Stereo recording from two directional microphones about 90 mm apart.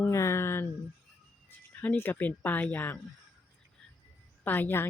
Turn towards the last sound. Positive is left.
turn(degrees=25)  # may be behind; listen again after turning